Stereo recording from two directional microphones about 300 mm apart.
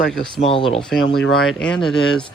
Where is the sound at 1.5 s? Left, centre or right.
Centre.